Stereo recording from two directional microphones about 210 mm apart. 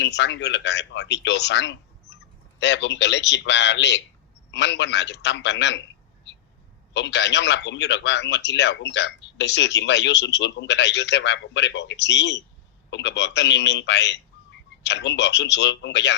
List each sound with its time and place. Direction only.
0.0 s speech: 55° left (ahead or behind)
6.9 s speech: 55° left (ahead or behind)